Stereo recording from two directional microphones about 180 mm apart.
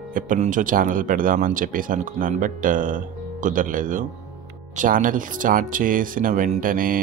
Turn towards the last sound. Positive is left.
turn(degrees=-50)  # may be behind; listen again after turning